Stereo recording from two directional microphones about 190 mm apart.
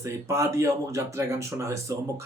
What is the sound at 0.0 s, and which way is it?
Speech, 15° right (ahead or behind).